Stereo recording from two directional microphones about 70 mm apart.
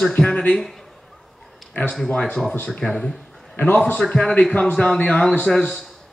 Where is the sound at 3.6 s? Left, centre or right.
Left.